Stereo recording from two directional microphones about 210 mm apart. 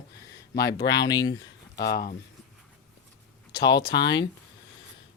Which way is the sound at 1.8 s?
50° left (ahead or behind).